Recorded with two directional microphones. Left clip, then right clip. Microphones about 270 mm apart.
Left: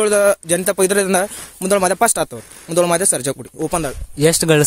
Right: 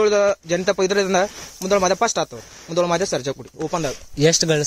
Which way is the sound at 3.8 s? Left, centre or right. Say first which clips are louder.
Left 1 dB; left.